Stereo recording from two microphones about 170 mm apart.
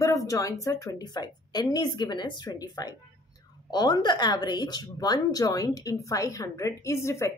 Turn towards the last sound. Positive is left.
turn(degrees=15)  # may be behind; listen again after turning